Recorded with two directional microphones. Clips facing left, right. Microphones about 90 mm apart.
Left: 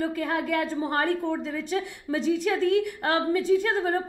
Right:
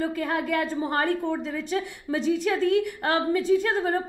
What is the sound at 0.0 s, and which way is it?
A woman's voice, 20° right (ahead or behind).